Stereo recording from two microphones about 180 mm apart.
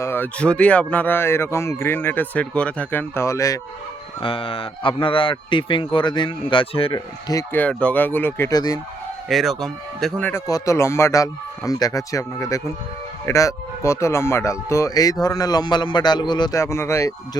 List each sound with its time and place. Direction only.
0.0 s speech: 10° left (ahead or behind)
4.2 s speech: 30° left (ahead or behind)
7.3 s speech: 15° left (ahead or behind)
9.3 s speech: centre (ahead or behind); by 17.2 s 15° left (ahead or behind)